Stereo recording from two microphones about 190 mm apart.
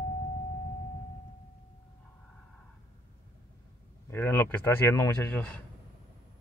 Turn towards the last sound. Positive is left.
turn(degrees=10)  # may be behind; listen again after turning